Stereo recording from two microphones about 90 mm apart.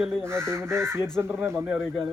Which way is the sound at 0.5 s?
30° right (ahead or behind).